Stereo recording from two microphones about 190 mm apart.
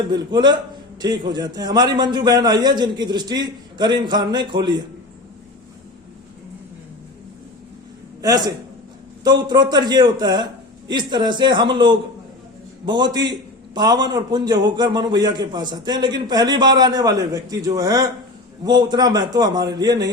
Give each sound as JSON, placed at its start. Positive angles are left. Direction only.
{"t": 0.1, "sound": "a man's voice", "side_deg": -20}
{"t": 8.2, "sound": "a man's voice", "side_deg": -20}